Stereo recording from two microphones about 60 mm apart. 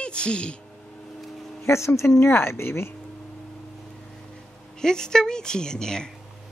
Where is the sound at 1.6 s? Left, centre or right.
Left.